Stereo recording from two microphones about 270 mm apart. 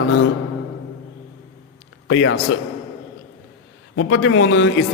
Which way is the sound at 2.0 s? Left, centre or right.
Left.